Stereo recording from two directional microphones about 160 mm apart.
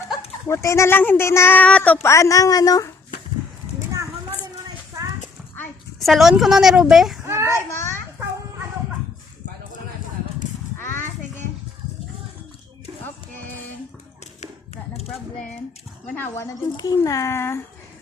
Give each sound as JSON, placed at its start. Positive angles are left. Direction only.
{"t": 0.4, "sound": "speech", "side_deg": 15}
{"t": 6.0, "sound": "speech", "side_deg": 0}
{"t": 7.3, "sound": "child singing", "side_deg": -15}
{"t": 7.5, "sound": "a sound", "side_deg": 15}
{"t": 16.0, "sound": "speech", "side_deg": 10}